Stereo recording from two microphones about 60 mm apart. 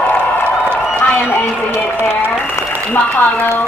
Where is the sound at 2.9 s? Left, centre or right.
Left.